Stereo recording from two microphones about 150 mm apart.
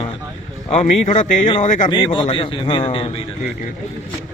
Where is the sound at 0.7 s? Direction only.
50° left (ahead or behind).